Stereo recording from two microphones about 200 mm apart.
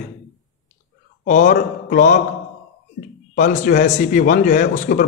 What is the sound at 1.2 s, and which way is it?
Speech, 40° left (ahead or behind).